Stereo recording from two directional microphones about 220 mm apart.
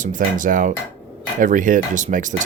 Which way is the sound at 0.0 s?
35° right (ahead or behind).